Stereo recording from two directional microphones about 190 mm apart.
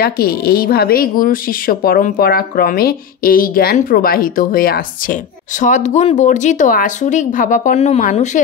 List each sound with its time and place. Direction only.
0.0 s speech: 55° left (ahead or behind)